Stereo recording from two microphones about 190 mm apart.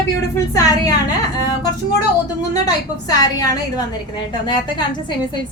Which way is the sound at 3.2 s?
20° left (ahead or behind).